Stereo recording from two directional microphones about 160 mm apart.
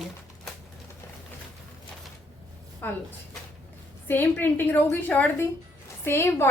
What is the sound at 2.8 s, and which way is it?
Speech, 10° left (ahead or behind).